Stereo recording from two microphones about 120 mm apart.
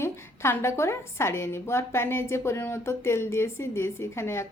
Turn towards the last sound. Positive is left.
turn(degrees=20)  # may be behind; listen again after turning